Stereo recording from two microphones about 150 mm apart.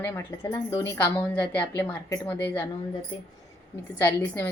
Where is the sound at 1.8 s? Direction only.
15° left (ahead or behind).